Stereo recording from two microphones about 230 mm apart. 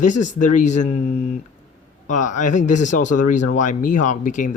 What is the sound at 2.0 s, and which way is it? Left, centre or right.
Speech, left.